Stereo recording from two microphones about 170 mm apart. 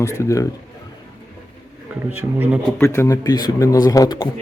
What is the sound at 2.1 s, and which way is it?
Speech, 10° right (ahead or behind).